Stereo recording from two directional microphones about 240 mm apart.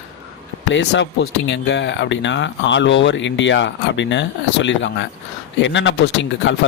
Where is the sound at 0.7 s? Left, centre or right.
Left.